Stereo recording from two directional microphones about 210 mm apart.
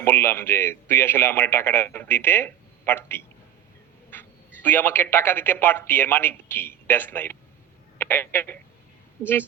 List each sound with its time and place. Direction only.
0.0 s a man's voice: 10° left (ahead or behind)